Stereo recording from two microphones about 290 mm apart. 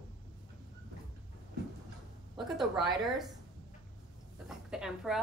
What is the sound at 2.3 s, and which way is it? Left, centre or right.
Speech, centre.